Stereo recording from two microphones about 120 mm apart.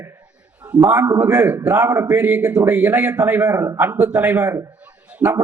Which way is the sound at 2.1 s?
10° right (ahead or behind).